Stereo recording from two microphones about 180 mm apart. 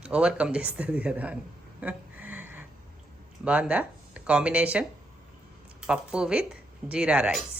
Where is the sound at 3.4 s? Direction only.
5° right (ahead or behind).